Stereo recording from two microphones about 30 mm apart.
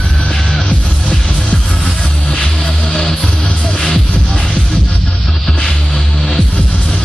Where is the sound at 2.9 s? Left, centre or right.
Left.